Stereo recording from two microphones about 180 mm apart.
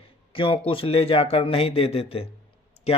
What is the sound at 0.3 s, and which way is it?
A man's voice, 30° left (ahead or behind).